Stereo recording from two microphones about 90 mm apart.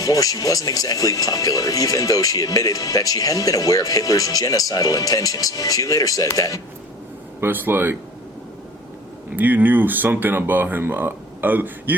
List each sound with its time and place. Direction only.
0.0 s speech: 40° left (ahead or behind)
7.4 s speech: 25° right (ahead or behind)
9.3 s speech: 20° right (ahead or behind)